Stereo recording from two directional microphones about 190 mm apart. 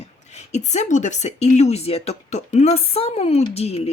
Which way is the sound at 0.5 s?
35° left (ahead or behind).